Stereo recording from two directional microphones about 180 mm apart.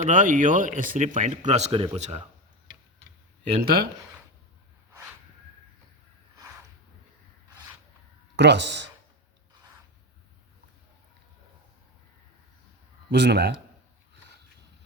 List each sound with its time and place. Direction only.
0.0 s a man's voice: 45° right (ahead or behind)
3.6 s speech: 55° right (ahead or behind)
8.4 s speech: 75° right (ahead or behind)
13.1 s a man's voice: 70° right (ahead or behind)